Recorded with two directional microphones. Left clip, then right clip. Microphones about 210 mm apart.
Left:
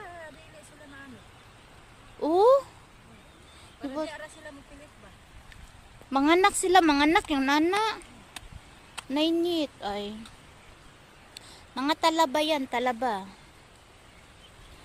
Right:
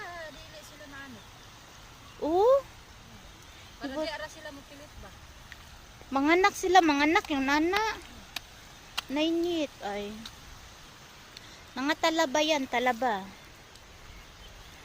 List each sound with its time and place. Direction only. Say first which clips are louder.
2.2 s a sound: left 3 dB; 30° left (ahead or behind)
4.0 s speech: right 2 dB; 25° right (ahead or behind)
6.1 s speech: left 2 dB; 20° left (ahead or behind)
9.1 s speech: left 3 dB; 25° left (ahead or behind)
11.3 s a woman's voice: left 3 dB; 20° left (ahead or behind)